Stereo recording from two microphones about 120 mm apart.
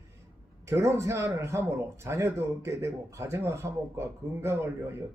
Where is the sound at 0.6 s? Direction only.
25° right (ahead or behind).